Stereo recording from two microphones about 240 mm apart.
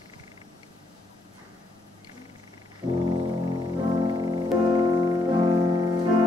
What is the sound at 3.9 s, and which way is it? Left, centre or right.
Music, centre.